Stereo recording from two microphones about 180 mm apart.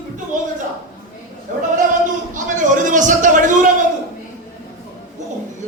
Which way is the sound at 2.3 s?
45° right (ahead or behind).